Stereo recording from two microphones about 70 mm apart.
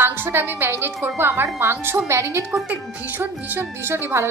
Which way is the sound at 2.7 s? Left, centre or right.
Right.